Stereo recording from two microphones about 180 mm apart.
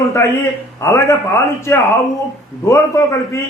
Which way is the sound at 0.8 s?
15° left (ahead or behind).